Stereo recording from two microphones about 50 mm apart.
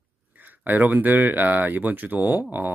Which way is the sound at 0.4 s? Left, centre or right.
Right.